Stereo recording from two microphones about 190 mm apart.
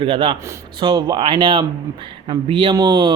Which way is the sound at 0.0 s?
25° right (ahead or behind).